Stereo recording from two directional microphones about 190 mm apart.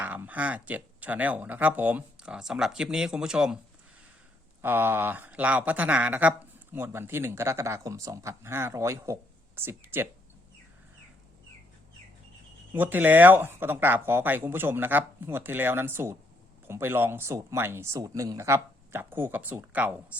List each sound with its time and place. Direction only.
0.0 s speech: 10° right (ahead or behind)
4.6 s speech: 10° right (ahead or behind)
12.7 s speech: 10° right (ahead or behind)